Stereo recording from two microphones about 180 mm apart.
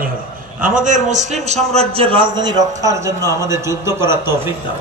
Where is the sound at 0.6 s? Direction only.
45° right (ahead or behind); by 4.4 s 15° right (ahead or behind).